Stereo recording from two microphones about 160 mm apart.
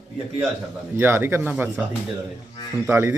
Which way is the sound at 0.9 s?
15° right (ahead or behind).